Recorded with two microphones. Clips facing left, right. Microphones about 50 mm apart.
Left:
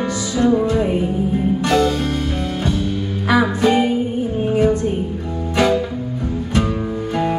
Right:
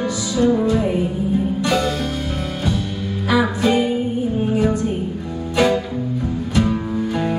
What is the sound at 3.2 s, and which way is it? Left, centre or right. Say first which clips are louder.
Music: left 2 dB; left.